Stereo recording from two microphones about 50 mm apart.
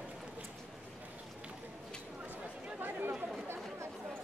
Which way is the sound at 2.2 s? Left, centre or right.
Right.